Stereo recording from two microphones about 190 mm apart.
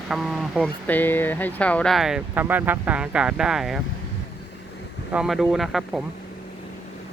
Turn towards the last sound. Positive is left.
turn(degrees=0)  # may be behind; listen again after turning